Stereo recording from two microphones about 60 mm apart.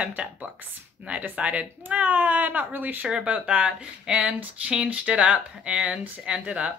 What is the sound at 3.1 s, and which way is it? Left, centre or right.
Speech, centre.